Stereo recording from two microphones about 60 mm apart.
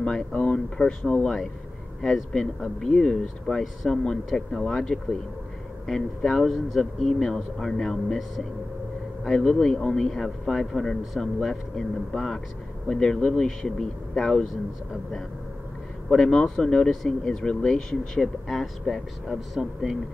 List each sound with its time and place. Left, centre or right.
0.0 s a man's voice: centre
16.1 s speech: centre
16.9 s a man's voice: centre